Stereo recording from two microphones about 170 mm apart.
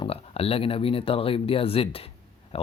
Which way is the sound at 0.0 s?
35° left (ahead or behind).